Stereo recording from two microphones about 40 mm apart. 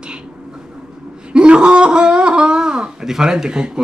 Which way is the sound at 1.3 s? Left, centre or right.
Right.